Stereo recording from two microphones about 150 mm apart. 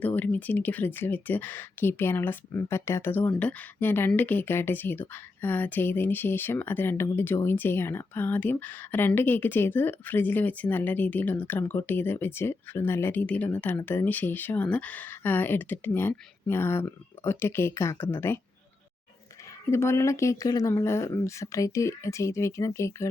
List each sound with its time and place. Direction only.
0.0 s speech: 10° left (ahead or behind)
19.7 s speech: 20° left (ahead or behind)